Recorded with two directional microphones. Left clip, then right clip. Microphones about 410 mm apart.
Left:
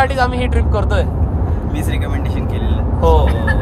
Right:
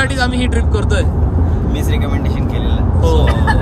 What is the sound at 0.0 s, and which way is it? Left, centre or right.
Vehicle, centre.